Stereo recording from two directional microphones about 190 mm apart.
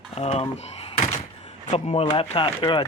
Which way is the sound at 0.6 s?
35° left (ahead or behind).